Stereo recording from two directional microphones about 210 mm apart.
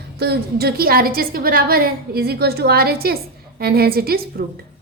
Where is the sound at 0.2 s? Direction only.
50° right (ahead or behind).